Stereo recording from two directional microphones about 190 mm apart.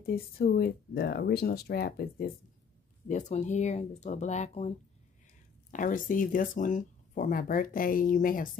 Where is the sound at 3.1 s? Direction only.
35° left (ahead or behind).